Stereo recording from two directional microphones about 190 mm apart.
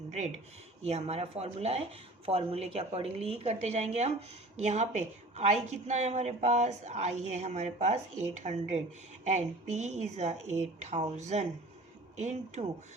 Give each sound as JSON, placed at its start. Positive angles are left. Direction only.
{"t": 0.1, "sound": "a woman's voice", "side_deg": -35}